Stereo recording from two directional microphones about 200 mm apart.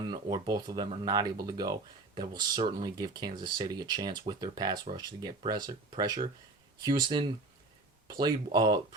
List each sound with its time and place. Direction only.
0.0 s speech: 20° right (ahead or behind)